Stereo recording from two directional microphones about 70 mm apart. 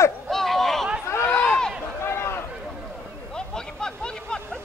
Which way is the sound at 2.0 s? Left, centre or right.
Left.